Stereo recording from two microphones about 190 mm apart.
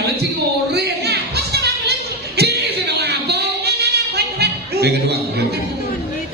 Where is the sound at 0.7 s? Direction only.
60° right (ahead or behind).